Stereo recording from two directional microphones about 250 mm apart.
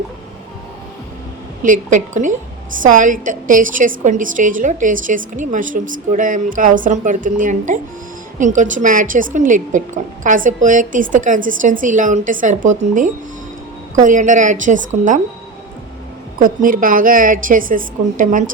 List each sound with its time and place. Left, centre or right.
1.6 s a woman's voice: right
16.4 s a woman's voice: right